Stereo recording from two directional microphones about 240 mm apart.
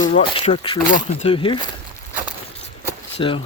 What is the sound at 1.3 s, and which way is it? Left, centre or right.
Speech, left.